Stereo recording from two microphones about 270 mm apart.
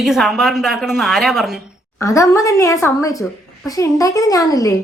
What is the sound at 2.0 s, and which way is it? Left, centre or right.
A woman's voice, centre.